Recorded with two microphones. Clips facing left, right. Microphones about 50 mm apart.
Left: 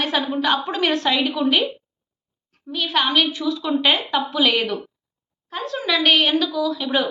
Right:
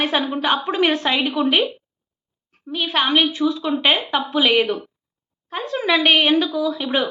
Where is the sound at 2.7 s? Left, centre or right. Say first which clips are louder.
Right 1 dB; right.